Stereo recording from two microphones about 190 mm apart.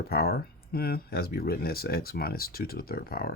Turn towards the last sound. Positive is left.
turn(degrees=55)  # may be behind; listen again after turning